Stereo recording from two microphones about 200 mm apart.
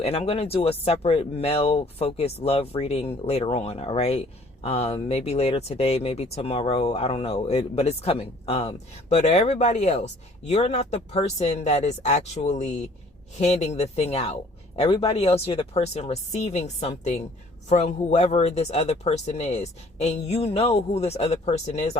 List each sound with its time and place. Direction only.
0.0 s speech: 30° left (ahead or behind)